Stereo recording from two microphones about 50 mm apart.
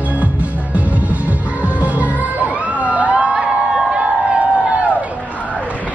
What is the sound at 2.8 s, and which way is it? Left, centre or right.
Music, right.